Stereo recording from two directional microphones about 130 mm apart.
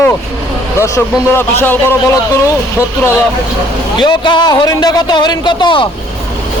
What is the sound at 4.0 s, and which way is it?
A man's voice, 35° left (ahead or behind).